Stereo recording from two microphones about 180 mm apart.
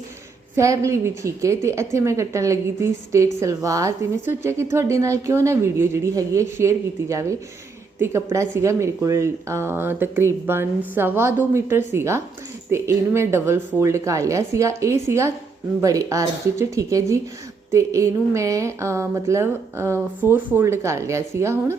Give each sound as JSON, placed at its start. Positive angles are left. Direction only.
{"t": 0.5, "sound": "a woman's voice", "side_deg": -15}